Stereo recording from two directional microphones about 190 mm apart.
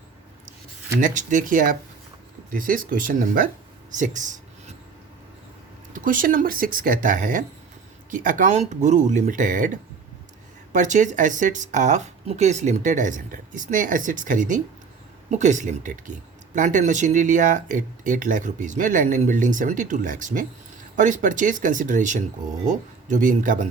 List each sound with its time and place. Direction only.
0.9 s speech: 40° right (ahead or behind)
3.9 s writing: 40° right (ahead or behind)
5.9 s speech: 45° right (ahead or behind)